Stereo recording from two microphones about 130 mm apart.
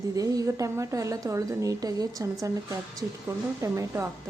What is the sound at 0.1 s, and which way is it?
A woman's voice, 25° right (ahead or behind).